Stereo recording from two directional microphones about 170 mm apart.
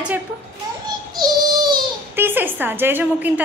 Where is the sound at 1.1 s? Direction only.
25° right (ahead or behind).